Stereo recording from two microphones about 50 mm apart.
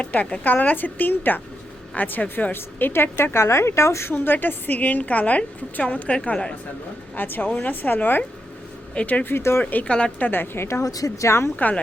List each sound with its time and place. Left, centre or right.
0.0 s a woman's voice: left
2.5 s a woman's voice: left
3.3 s speech: left
4.1 s a woman's voice: left; by 6.6 s centre
7.2 s a woman's voice: left
9.0 s a woman's voice: left
9.3 s a woman's voice: left
9.8 s a woman's voice: left
10.2 s a woman's voice: left